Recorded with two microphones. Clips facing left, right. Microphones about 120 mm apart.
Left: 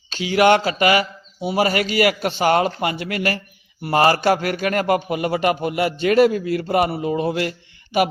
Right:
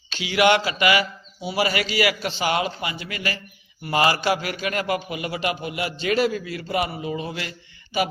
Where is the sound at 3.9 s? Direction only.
40° left (ahead or behind).